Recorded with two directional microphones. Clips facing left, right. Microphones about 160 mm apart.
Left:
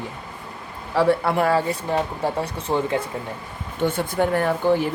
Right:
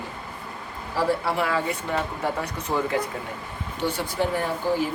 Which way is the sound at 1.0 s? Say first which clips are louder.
Left 5 dB; 60° left (ahead or behind).